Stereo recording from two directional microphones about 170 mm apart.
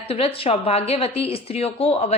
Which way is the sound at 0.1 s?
35° left (ahead or behind).